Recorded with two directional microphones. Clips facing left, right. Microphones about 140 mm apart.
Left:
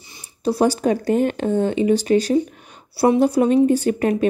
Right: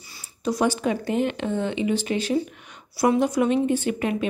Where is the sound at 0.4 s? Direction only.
30° left (ahead or behind).